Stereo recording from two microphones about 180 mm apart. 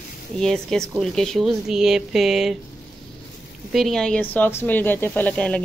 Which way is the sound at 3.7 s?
Centre (ahead or behind).